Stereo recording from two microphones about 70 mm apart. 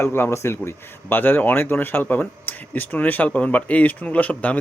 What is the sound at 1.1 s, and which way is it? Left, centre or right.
Speech, left.